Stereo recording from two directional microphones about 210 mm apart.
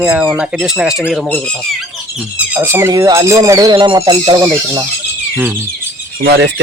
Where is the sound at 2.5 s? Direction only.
10° right (ahead or behind).